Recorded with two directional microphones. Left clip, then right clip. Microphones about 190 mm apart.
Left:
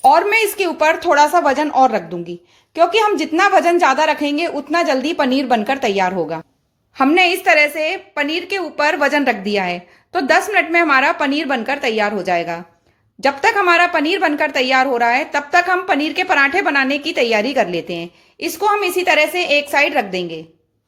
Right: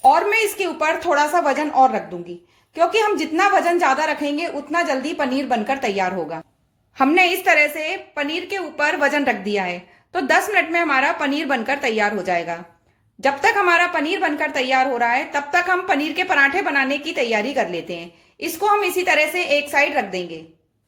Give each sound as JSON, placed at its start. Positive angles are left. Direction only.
{"t": 0.0, "sound": "a woman's voice", "side_deg": 35}